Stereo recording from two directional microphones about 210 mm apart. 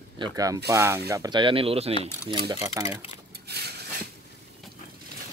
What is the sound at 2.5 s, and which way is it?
Speech, 15° right (ahead or behind).